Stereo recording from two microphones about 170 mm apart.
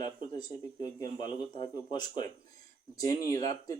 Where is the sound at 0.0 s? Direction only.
25° left (ahead or behind).